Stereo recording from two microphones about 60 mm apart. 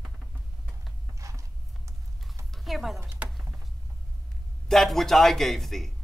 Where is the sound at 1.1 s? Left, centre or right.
Right.